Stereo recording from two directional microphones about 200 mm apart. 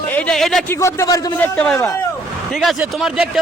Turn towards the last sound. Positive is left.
turn(degrees=-5)  # may be behind; listen again after turning